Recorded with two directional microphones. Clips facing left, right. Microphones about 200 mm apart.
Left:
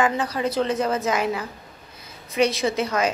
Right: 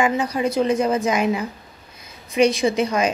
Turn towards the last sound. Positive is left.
turn(degrees=-15)  # may be behind; listen again after turning